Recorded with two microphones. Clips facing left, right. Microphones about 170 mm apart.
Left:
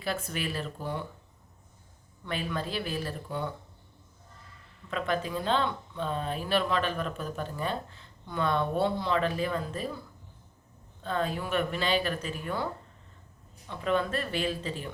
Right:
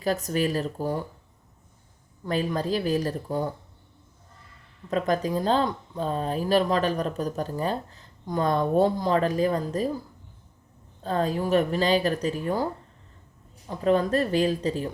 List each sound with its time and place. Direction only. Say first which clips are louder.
0.0 s speech: right 8 dB; 40° right (ahead or behind)
2.2 s speech: right 7 dB; 40° right (ahead or behind)
4.9 s speech: right 6 dB; 40° right (ahead or behind)
11.0 s speech: right 5 dB; 40° right (ahead or behind)
13.7 s speech: right 6 dB; 40° right (ahead or behind)